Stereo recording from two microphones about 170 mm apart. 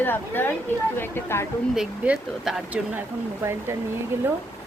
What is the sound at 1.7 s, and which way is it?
A woman's voice, 5° right (ahead or behind).